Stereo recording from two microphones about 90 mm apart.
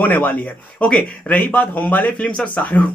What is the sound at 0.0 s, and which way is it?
Speech, 20° left (ahead or behind).